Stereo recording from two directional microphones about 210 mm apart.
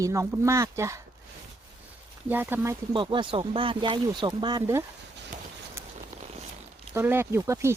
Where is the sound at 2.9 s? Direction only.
20° right (ahead or behind).